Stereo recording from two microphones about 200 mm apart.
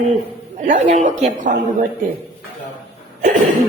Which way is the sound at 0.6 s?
35° right (ahead or behind).